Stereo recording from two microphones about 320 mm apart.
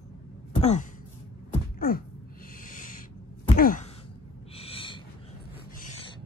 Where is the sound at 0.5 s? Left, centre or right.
Left.